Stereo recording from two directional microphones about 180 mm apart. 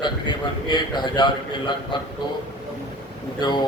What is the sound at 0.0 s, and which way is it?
A man's voice, 25° left (ahead or behind).